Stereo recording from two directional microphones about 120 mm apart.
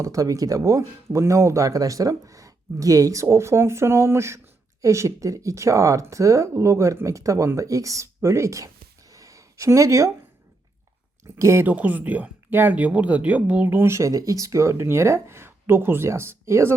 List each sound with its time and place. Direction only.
0.0 s speech: 25° right (ahead or behind)
9.1 s a sound: 30° right (ahead or behind)
11.3 s speech: 25° right (ahead or behind)
11.6 s speech: 15° right (ahead or behind)